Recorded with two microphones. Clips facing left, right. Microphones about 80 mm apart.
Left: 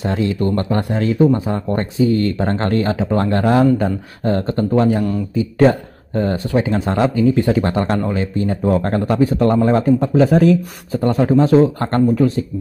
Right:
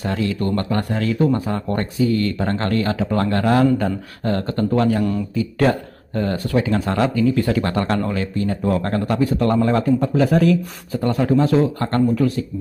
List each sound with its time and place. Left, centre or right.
0.0 s speech: left